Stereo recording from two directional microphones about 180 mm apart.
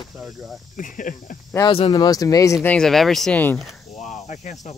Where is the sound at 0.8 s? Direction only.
45° left (ahead or behind).